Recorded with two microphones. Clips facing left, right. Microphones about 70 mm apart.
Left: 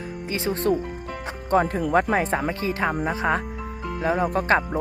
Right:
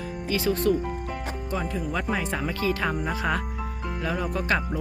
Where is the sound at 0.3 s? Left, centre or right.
Left.